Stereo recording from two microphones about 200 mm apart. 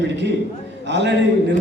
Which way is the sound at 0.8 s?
60° right (ahead or behind).